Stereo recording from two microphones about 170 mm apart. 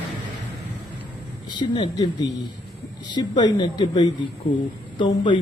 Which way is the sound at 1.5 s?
30° left (ahead or behind).